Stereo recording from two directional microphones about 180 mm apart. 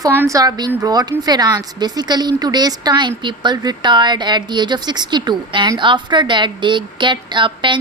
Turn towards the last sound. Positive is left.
turn(degrees=-25)  # may be behind; listen again after turning